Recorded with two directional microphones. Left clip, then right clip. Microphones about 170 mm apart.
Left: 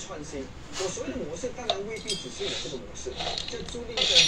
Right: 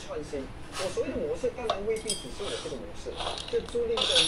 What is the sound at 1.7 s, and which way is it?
Speech, 20° right (ahead or behind).